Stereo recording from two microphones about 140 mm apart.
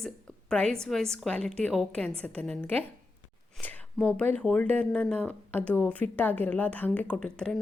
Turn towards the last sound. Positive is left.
turn(degrees=5)  # may be behind; listen again after turning